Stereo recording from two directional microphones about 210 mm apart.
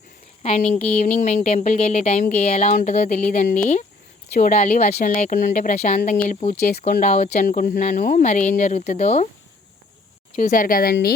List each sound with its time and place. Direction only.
0.4 s speech: 30° left (ahead or behind)
10.3 s speech: 40° left (ahead or behind)